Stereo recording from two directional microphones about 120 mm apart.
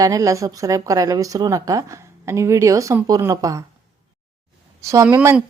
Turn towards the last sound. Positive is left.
turn(degrees=-20)  # may be behind; listen again after turning